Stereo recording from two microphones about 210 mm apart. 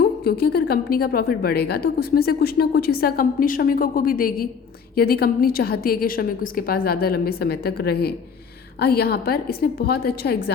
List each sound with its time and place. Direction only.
0.3 s a woman's voice: 50° left (ahead or behind)